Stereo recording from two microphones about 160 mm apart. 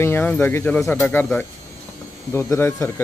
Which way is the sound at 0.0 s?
15° left (ahead or behind).